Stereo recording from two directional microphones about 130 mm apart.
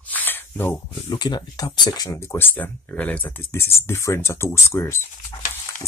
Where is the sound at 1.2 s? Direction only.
30° left (ahead or behind).